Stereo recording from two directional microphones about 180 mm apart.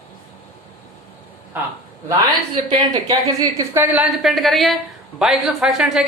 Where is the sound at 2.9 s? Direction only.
20° right (ahead or behind).